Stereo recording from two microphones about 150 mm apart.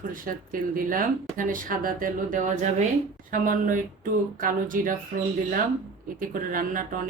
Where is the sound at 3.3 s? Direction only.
65° right (ahead or behind).